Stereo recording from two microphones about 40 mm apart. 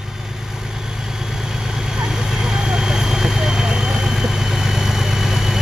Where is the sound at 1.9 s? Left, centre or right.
Centre.